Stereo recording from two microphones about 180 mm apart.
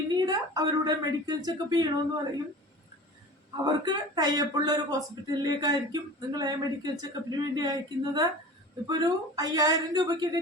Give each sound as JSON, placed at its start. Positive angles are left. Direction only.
{"t": 0.1, "sound": "a woman's voice", "side_deg": -20}
{"t": 3.6, "sound": "speech", "side_deg": -20}